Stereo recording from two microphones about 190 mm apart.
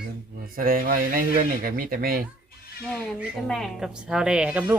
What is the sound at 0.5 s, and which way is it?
Speech, 50° right (ahead or behind).